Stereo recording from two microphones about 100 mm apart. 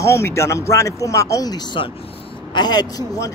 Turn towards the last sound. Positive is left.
turn(degrees=40)  # may be behind; listen again after turning